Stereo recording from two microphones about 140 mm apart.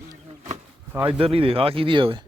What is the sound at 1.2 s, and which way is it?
Speech, 40° right (ahead or behind).